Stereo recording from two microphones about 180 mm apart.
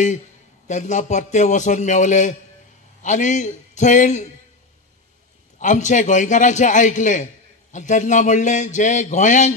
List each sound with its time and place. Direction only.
0.7 s a man's voice: 40° left (ahead or behind)
5.6 s speech: 40° left (ahead or behind)